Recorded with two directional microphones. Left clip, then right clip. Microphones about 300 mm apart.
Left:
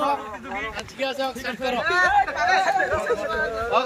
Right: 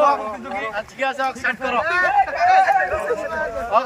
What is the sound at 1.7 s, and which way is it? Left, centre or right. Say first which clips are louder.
Speech: right 1 dB; right.